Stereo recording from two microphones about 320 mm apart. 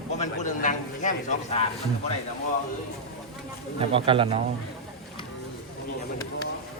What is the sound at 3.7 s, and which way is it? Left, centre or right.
Speech, centre.